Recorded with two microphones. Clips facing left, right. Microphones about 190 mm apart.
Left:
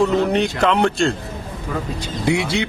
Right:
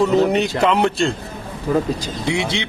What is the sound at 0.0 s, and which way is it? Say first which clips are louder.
Speech: right 1 dB; centre (ahead or behind).